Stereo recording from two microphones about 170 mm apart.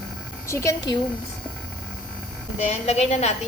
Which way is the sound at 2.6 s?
40° left (ahead or behind).